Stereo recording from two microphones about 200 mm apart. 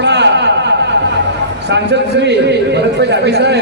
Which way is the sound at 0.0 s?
60° right (ahead or behind).